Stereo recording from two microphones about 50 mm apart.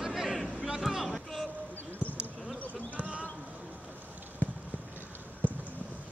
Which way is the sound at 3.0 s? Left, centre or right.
Right.